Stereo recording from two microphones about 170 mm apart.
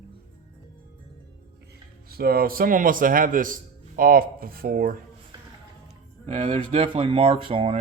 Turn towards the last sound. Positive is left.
turn(degrees=-35)  # may be behind; listen again after turning